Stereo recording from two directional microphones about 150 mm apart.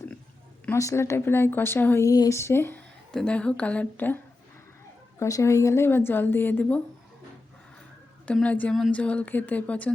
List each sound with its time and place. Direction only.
0.6 s speech: 20° left (ahead or behind)
5.2 s speech: 20° left (ahead or behind)
8.3 s speech: 10° left (ahead or behind)